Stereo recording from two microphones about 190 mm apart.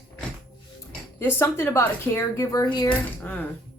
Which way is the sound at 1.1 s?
15° left (ahead or behind).